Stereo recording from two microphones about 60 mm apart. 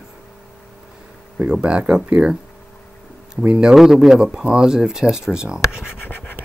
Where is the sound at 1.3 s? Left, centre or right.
Centre.